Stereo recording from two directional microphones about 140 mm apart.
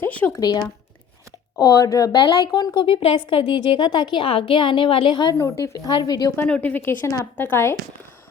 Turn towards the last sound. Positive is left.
turn(degrees=15)  # may be behind; listen again after turning